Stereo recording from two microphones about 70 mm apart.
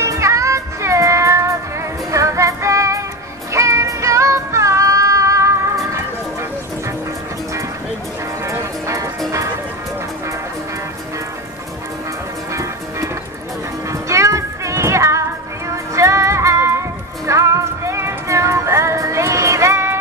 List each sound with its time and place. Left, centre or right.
0.0 s music: right
8.5 s music: right
13.8 s music: right